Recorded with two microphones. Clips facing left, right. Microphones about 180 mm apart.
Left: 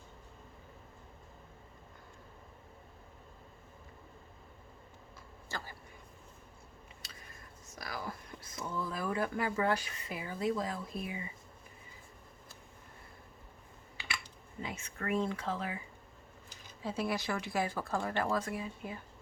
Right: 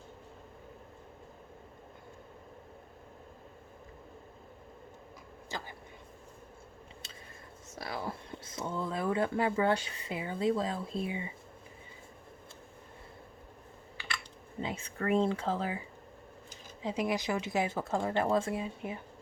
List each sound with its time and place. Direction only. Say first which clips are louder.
5.5 s speech: right 2 dB; 20° right (ahead or behind)
7.8 s speech: right 4 dB; 25° right (ahead or behind)
14.6 s speech: right 5 dB; 30° right (ahead or behind)
16.8 s speech: right 3 dB; 15° right (ahead or behind)